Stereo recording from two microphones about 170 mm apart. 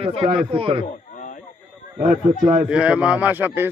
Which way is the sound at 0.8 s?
50° left (ahead or behind).